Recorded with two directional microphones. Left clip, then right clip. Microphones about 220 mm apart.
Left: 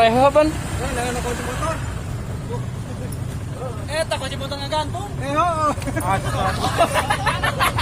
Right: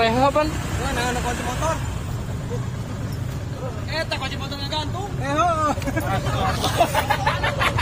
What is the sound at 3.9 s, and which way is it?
Vehicle, 55° left (ahead or behind).